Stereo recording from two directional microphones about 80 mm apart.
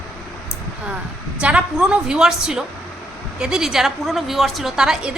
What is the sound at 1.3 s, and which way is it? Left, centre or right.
A woman's voice, centre.